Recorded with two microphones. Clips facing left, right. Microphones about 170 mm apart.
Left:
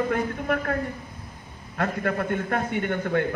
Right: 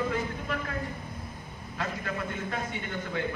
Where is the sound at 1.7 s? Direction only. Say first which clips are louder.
Left 8 dB; 55° left (ahead or behind).